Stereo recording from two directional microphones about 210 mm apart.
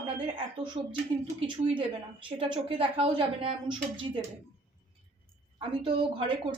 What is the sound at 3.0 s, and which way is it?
A woman's voice, 25° right (ahead or behind).